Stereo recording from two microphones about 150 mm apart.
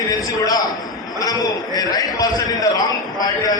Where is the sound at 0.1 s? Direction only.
25° left (ahead or behind).